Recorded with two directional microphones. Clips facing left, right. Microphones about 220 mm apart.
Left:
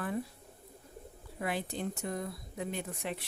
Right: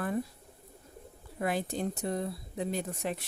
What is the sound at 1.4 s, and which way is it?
Speech, 45° right (ahead or behind).